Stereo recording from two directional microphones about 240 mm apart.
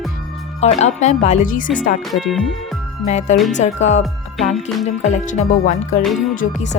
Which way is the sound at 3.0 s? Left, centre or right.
Left.